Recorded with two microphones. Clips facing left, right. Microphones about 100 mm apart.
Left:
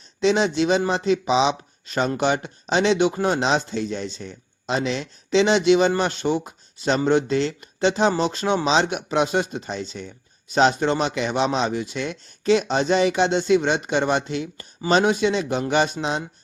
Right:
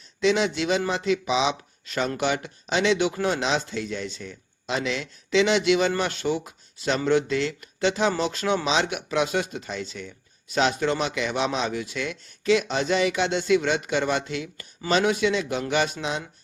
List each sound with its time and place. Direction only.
0.2 s speech: 30° left (ahead or behind)